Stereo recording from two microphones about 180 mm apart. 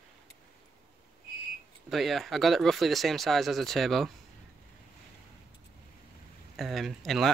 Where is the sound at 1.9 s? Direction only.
Centre (ahead or behind).